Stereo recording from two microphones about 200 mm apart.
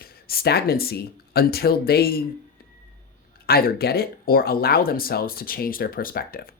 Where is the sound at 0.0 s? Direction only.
50° left (ahead or behind).